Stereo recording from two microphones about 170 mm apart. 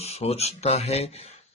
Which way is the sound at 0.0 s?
35° left (ahead or behind).